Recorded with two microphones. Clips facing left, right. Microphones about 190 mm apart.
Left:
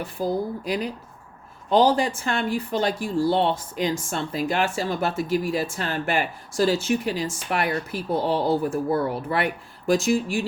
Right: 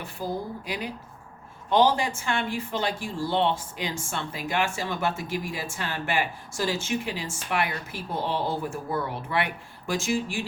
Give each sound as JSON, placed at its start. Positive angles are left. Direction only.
{"t": 0.6, "sound": "speech", "side_deg": 40}